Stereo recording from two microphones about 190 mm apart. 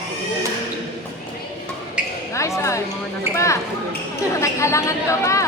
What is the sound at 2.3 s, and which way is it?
A woman's voice, 15° left (ahead or behind).